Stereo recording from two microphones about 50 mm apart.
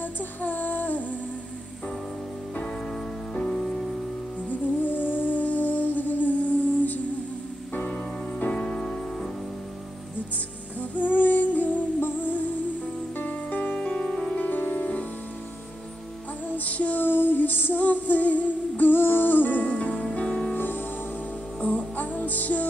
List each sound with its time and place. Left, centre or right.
0.0 s music: left
2.9 s music: centre
4.4 s music: left; by 9.3 s centre
10.8 s music: left
14.4 s music: left
16.4 s female singing: left
17.0 s music: left
20.5 s music: left
21.5 s music: left